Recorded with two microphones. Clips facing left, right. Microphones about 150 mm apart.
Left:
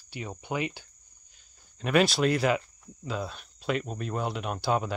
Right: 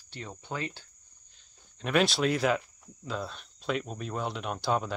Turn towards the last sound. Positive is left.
turn(degrees=5)  # may be behind; listen again after turning